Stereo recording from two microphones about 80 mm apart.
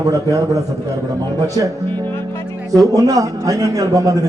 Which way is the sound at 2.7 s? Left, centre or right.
Right.